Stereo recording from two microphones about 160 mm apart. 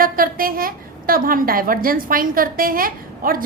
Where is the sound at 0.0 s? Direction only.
65° right (ahead or behind).